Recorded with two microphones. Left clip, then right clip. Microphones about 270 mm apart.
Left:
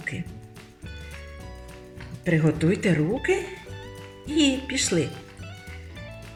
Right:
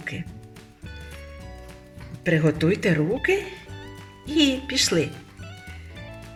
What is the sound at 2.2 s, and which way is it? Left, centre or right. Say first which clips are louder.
Speech: right 2 dB; right.